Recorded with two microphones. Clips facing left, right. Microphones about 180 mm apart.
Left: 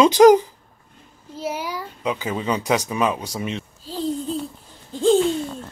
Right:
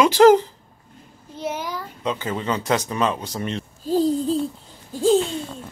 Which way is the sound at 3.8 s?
40° right (ahead or behind).